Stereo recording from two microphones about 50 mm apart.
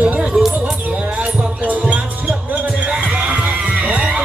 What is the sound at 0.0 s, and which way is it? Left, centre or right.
Music, right.